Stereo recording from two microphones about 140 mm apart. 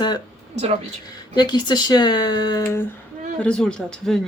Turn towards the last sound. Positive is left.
turn(degrees=5)  # may be behind; listen again after turning